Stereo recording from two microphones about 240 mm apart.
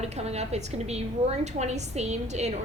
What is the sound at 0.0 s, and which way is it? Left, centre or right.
A woman's voice, right.